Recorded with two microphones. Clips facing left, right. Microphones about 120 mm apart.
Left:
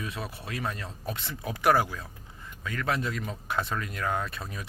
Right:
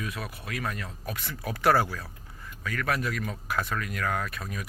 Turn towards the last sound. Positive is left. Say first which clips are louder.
# even
turn(degrees=25)  # may be behind; listen again after turning